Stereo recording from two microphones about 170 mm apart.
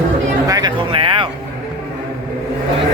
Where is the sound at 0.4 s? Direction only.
25° right (ahead or behind).